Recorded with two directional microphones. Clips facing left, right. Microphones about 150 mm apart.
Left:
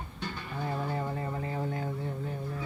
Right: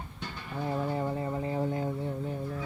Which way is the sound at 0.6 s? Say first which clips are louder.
Right 3 dB; 10° right (ahead or behind).